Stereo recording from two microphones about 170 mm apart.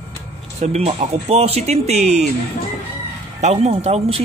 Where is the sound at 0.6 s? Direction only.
40° right (ahead or behind).